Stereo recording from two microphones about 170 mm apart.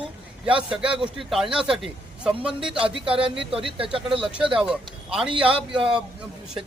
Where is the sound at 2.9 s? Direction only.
30° right (ahead or behind).